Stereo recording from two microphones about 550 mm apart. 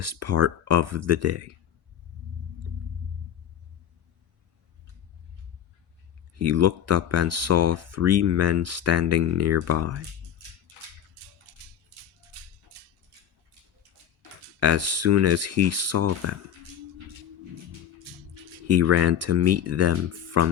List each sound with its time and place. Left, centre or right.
0.0 s speech: right
6.3 s speech: right
14.6 s speech: right
18.7 s speech: right